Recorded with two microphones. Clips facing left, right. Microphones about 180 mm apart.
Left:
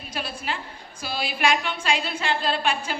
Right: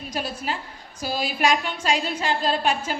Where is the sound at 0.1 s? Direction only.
40° right (ahead or behind).